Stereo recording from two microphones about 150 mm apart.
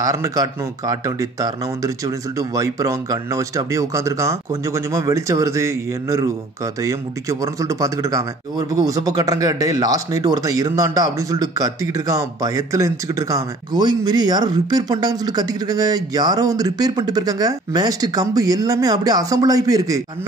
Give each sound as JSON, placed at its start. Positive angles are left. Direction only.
{"t": 0.0, "sound": "speech", "side_deg": -25}